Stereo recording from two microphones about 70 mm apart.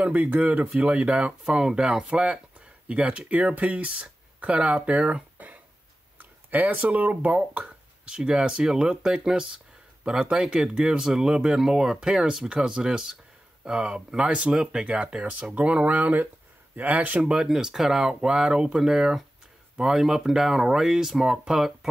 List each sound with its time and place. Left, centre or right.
0.0 s speech: right; by 21.7 s centre